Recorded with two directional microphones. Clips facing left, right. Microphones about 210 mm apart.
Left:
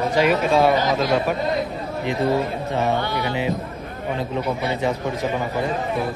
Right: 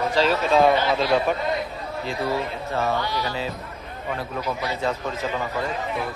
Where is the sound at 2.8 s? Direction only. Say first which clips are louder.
Left 2 dB; 20° left (ahead or behind).